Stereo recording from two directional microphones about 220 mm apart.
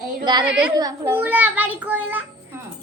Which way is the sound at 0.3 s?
20° right (ahead or behind).